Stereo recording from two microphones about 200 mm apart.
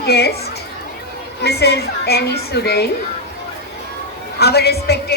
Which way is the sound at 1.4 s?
55° left (ahead or behind).